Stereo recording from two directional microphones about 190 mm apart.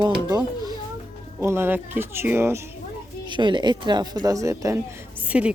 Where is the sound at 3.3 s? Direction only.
25° right (ahead or behind); by 5.5 s 5° right (ahead or behind).